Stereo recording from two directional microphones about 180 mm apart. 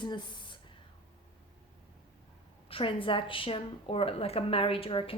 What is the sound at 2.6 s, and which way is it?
A woman's voice, 30° left (ahead or behind).